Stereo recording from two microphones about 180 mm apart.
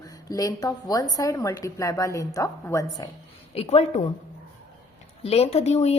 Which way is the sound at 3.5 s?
35° left (ahead or behind).